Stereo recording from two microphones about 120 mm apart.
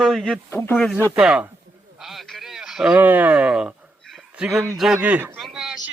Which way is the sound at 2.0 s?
Centre (ahead or behind).